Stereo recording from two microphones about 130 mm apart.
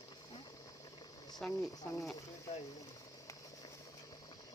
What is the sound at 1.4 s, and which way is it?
Speech, centre (ahead or behind).